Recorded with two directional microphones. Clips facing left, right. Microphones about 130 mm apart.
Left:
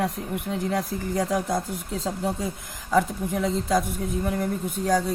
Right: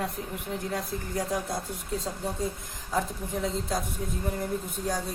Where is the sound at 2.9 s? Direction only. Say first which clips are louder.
Left 7 dB; 90° left.